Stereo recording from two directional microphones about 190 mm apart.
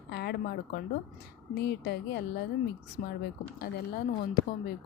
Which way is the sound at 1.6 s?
60° left (ahead or behind).